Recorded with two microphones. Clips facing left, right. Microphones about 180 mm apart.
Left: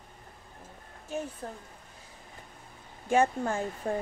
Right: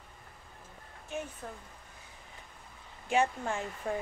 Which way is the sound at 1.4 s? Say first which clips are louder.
Left 3 dB; 40° left (ahead or behind).